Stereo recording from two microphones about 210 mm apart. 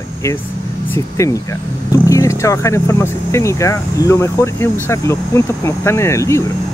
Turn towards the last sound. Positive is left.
turn(degrees=15)  # may be behind; listen again after turning